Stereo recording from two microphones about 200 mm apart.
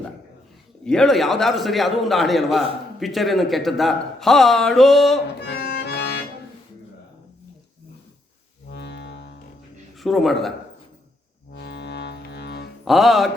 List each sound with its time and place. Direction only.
0.9 s a man's voice: centre (ahead or behind)
5.4 s accordion: 55° left (ahead or behind)
8.7 s music: 60° left (ahead or behind)
10.0 s a man's voice: centre (ahead or behind)
11.5 s music: 60° left (ahead or behind)
12.8 s a man's voice: centre (ahead or behind)